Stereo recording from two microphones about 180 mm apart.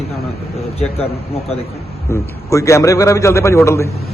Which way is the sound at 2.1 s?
15° left (ahead or behind).